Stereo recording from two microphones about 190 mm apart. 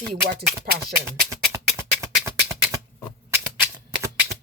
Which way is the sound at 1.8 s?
15° right (ahead or behind).